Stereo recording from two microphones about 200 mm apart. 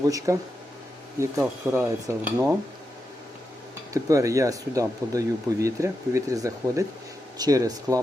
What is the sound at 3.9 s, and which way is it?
Speech, 15° right (ahead or behind).